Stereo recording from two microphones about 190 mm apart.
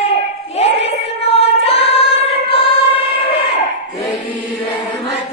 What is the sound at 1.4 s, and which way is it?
Music, 30° left (ahead or behind).